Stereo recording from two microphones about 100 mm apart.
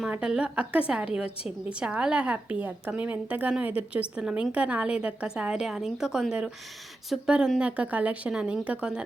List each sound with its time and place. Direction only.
0.1 s a woman's voice: 10° right (ahead or behind)